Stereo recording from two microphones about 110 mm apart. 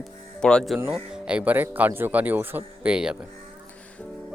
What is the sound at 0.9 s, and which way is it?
Speech, 10° right (ahead or behind).